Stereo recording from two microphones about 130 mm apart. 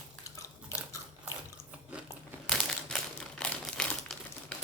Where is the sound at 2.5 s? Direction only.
5° left (ahead or behind).